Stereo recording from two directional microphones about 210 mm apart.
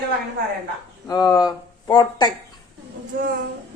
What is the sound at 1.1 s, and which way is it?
Speech, 20° left (ahead or behind).